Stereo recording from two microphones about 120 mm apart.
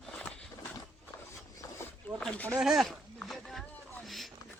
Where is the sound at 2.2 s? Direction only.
10° left (ahead or behind).